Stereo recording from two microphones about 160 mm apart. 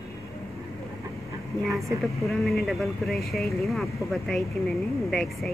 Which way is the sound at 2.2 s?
Centre (ahead or behind).